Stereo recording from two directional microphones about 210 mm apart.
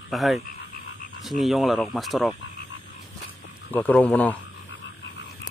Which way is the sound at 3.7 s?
5° left (ahead or behind).